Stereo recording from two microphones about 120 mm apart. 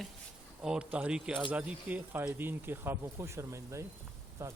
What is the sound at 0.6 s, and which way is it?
Speech, 5° right (ahead or behind).